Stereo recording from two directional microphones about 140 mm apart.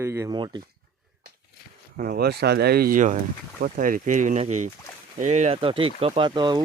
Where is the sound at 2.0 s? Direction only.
90° right; by 5.5 s 55° right (ahead or behind).